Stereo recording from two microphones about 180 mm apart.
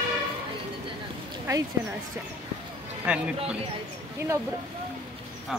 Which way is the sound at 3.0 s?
5° right (ahead or behind).